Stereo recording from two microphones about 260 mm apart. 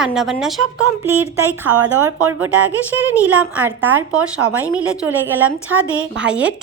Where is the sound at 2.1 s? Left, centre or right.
Right.